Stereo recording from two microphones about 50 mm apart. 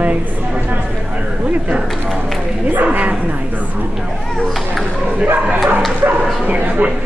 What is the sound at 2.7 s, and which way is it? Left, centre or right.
Speech, right.